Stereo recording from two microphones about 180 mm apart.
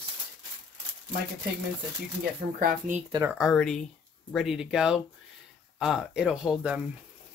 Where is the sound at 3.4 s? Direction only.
5° left (ahead or behind).